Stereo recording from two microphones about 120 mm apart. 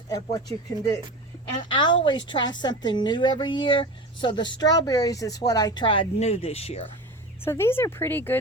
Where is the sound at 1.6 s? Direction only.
45° left (ahead or behind).